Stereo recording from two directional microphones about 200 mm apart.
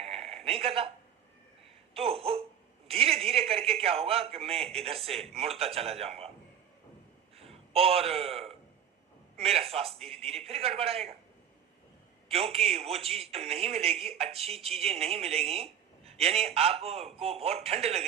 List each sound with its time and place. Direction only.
0.0 s a sound: 30° right (ahead or behind)
1.9 s a man's voice: 30° right (ahead or behind)
7.3 s a man's voice: 30° right (ahead or behind)
12.3 s speech: 30° right (ahead or behind)